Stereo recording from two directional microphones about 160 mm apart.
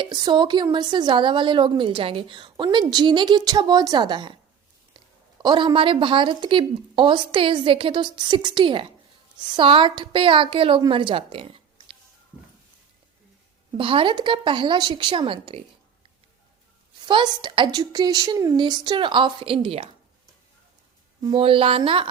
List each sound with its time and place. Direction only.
0.0 s a woman's voice: 25° right (ahead or behind)
13.7 s speech: 35° right (ahead or behind)
17.1 s a woman's voice: 30° right (ahead or behind)
21.2 s speech: 30° right (ahead or behind)